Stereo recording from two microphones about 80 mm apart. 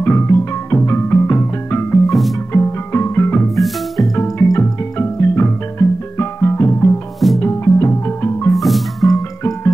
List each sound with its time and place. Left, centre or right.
0.0 s music: left
2.0 s music: centre
2.5 s music: left
3.5 s music: centre
4.2 s music: left
8.5 s music: centre